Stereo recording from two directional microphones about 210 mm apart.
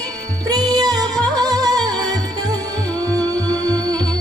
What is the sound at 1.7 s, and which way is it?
Music, centre (ahead or behind).